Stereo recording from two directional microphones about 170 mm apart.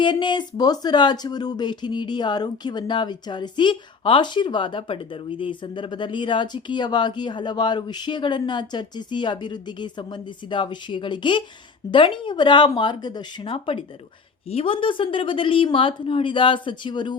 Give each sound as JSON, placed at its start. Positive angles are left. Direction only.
{"t": 0.0, "sound": "speech", "side_deg": 25}